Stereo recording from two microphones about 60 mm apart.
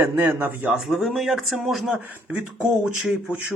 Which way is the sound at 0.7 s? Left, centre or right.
Centre.